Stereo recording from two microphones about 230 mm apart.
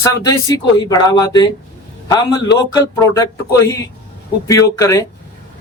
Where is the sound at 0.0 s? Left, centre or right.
Centre.